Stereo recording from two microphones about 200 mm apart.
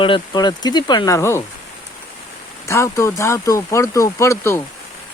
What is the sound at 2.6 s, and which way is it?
Speech, 15° left (ahead or behind).